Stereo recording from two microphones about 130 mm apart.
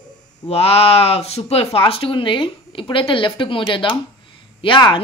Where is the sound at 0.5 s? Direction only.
50° left (ahead or behind).